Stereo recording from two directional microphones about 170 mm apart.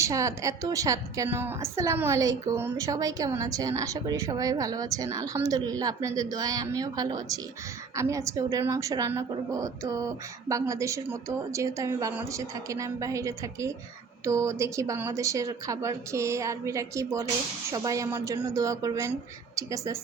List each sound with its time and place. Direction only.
0.0 s a woman's voice: 20° right (ahead or behind)